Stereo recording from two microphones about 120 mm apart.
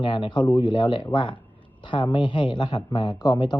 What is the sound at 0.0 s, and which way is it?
A man's voice, 40° left (ahead or behind).